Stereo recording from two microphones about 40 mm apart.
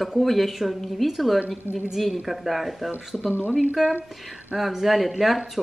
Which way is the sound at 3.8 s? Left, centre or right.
Centre.